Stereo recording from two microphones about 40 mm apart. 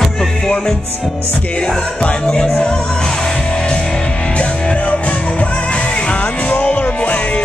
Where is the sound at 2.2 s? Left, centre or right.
Centre.